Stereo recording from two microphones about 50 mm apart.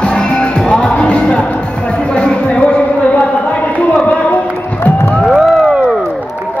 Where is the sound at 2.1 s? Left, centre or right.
Left.